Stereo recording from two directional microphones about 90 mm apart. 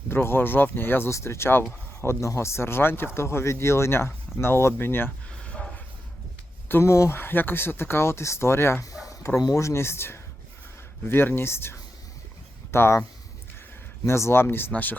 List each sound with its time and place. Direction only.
0.1 s speech: 25° left (ahead or behind)
5.3 s a sound: 15° left (ahead or behind)
6.7 s speech: 30° left (ahead or behind)
14.0 s speech: 30° left (ahead or behind)